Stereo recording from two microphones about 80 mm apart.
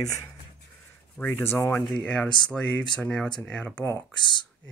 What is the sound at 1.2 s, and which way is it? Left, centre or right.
Speech, left.